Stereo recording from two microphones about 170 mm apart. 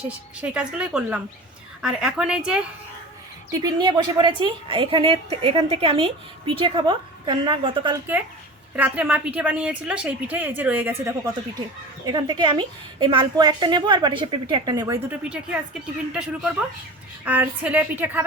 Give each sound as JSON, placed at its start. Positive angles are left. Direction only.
{"t": 0.1, "sound": "a woman's voice", "side_deg": -5}
{"t": 3.5, "sound": "a woman's voice", "side_deg": -25}
{"t": 8.7, "sound": "a woman's voice", "side_deg": -10}
{"t": 12.0, "sound": "a woman's voice", "side_deg": -25}
{"t": 15.1, "sound": "a woman's voice", "side_deg": -5}